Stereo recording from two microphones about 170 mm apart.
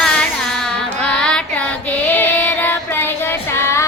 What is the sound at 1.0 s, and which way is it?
Female singing, 5° left (ahead or behind).